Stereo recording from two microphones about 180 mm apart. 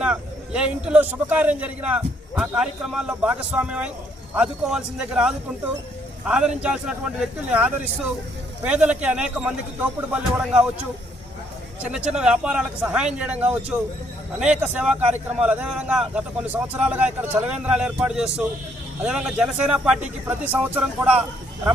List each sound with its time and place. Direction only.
0.0 s a man's voice: 5° right (ahead or behind)
11.8 s a man's voice: 5° right (ahead or behind)